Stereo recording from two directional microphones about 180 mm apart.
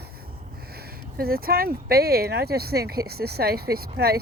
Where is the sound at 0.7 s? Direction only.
60° right (ahead or behind).